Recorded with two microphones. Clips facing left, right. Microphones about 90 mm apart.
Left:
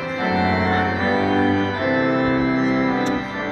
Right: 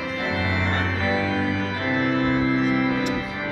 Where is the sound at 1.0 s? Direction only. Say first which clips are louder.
Left 5 dB; 30° left (ahead or behind).